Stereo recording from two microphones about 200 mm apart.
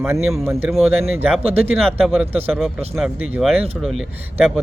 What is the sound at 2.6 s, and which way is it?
Speech, centre (ahead or behind).